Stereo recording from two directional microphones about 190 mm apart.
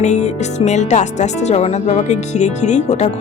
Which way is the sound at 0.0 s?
35° left (ahead or behind).